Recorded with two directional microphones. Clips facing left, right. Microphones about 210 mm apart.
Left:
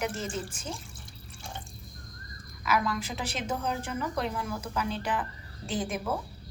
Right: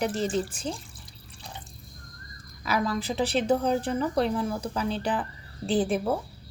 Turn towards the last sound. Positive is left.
turn(degrees=-35)  # may be behind; listen again after turning